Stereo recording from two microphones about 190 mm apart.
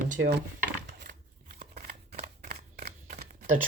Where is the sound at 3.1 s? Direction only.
40° right (ahead or behind).